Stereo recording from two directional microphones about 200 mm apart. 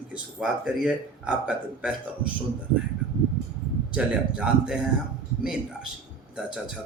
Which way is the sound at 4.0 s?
5° right (ahead or behind).